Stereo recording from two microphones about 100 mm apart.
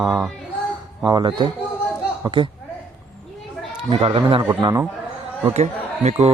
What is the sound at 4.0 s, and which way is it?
Speech, 65° right (ahead or behind).